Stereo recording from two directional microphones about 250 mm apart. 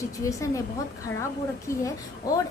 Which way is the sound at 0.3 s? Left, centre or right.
Centre.